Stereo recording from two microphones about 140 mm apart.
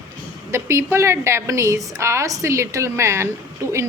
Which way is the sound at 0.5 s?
20° right (ahead or behind).